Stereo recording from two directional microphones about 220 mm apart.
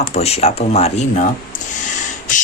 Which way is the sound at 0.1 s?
30° left (ahead or behind).